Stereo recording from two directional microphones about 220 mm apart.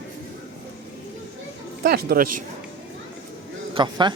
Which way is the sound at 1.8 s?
45° right (ahead or behind).